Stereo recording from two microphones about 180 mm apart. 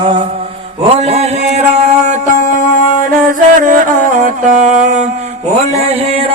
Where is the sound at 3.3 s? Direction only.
50° right (ahead or behind).